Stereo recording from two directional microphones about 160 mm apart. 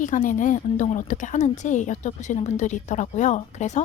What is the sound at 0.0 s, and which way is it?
A woman's voice, 55° left (ahead or behind).